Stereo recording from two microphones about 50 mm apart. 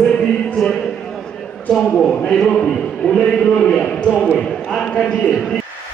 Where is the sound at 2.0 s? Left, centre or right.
Centre.